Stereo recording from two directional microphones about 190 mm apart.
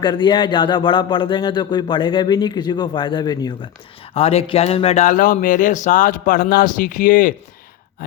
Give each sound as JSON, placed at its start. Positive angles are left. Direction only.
{"t": 0.0, "sound": "speech", "side_deg": 25}
{"t": 4.1, "sound": "speech", "side_deg": 30}